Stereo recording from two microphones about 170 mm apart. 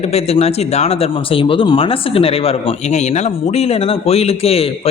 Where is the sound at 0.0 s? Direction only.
40° left (ahead or behind).